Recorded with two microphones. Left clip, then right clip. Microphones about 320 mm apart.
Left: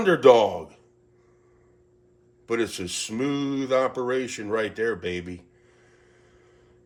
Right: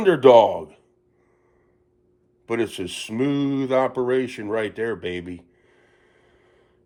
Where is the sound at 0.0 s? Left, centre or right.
Right.